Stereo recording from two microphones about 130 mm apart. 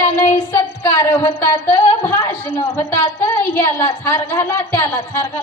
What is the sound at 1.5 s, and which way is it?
Speech, 35° left (ahead or behind).